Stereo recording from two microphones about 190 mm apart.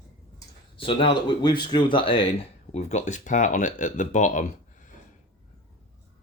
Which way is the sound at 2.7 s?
35° left (ahead or behind).